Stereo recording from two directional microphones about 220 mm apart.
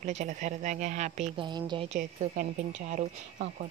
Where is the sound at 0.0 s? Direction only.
35° right (ahead or behind).